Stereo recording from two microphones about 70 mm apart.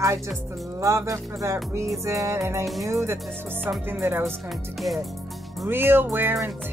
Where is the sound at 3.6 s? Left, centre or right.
Right.